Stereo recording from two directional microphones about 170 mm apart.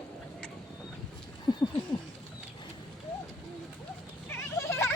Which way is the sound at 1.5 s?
25° left (ahead or behind).